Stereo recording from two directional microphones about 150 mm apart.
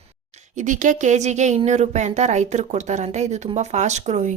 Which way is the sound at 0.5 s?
55° right (ahead or behind).